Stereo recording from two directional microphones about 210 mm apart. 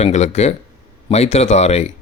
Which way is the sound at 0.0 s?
30° left (ahead or behind).